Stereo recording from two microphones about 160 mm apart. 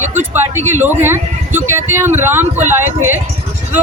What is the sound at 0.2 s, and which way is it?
Speech, 50° right (ahead or behind).